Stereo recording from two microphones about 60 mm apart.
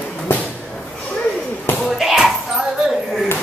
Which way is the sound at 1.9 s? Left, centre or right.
Centre.